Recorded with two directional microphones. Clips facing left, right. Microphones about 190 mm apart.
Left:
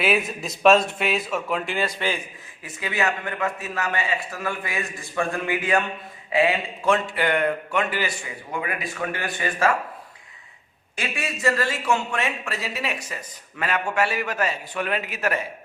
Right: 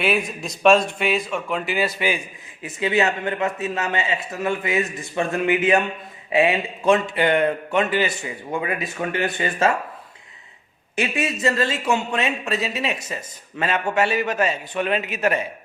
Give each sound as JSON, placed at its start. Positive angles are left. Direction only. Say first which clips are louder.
{"t": 0.0, "sound": "a man's voice", "louder": "right 1 dB", "side_deg": 0}
{"t": 2.6, "sound": "a man's voice", "louder": "right 5 dB", "side_deg": -25}
{"t": 10.9, "sound": "a man's voice", "louder": "right 6 dB", "side_deg": -20}